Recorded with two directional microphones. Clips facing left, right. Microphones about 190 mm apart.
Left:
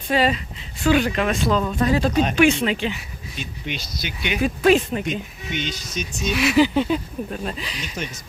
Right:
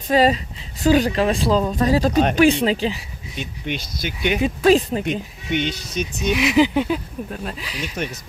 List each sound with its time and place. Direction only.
0.1 s speech: 40° right (ahead or behind)
3.3 s speech: 55° right (ahead or behind)
4.4 s speech: 35° right (ahead or behind)
5.5 s speech: 60° right (ahead or behind)
6.2 s speech: 15° right (ahead or behind)
7.9 s speech: 60° right (ahead or behind)